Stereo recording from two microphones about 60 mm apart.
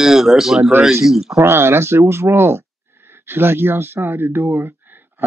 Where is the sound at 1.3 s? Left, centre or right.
Right.